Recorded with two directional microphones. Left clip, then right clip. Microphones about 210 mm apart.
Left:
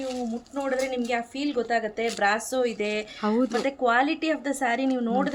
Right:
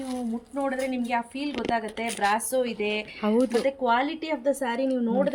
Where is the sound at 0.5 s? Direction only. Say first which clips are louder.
Left 1 dB; 15° left (ahead or behind).